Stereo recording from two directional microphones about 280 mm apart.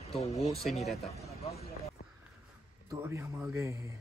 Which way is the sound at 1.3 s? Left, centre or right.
Left.